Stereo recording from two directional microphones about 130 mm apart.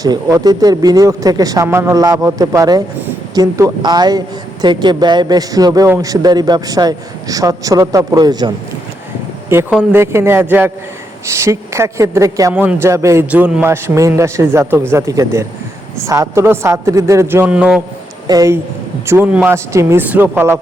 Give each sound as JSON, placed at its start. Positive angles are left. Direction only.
{"t": 0.0, "sound": "a man's voice", "side_deg": -30}
{"t": 9.9, "sound": "speech", "side_deg": -20}
{"t": 13.3, "sound": "speech", "side_deg": -10}
{"t": 18.3, "sound": "speech", "side_deg": -25}
{"t": 19.3, "sound": "speech", "side_deg": -10}
{"t": 19.5, "sound": "speech", "side_deg": -20}